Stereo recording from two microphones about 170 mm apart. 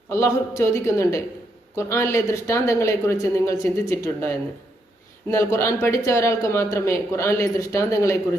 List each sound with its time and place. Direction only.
0.1 s speech: 15° left (ahead or behind)
5.3 s speech: 15° left (ahead or behind)